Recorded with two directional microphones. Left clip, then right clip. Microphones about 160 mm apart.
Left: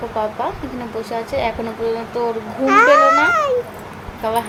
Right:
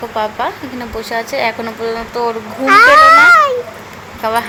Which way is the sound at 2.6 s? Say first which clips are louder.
Right 6 dB; 20° left (ahead or behind).